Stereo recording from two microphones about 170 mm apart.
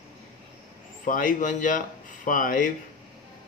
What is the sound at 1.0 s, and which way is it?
Speech, 50° left (ahead or behind).